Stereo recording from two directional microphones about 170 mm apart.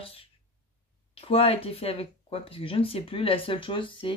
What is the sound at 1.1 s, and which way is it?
Speech, 35° left (ahead or behind).